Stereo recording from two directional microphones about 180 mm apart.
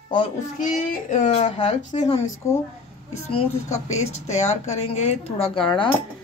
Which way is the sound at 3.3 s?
30° left (ahead or behind).